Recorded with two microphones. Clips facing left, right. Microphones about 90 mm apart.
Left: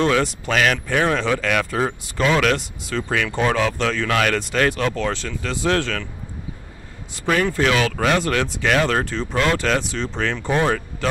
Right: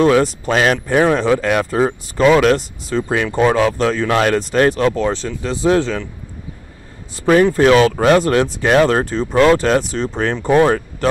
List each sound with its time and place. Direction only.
0.2 s speech: 30° right (ahead or behind)
7.5 s speech: 35° right (ahead or behind)